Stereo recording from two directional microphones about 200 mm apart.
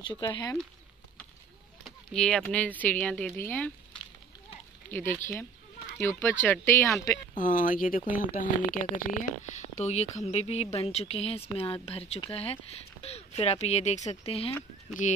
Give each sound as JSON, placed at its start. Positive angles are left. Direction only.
{"t": 0.0, "sound": "speech", "side_deg": 20}
{"t": 1.9, "sound": "speech", "side_deg": 5}
{"t": 7.3, "sound": "speech", "side_deg": 40}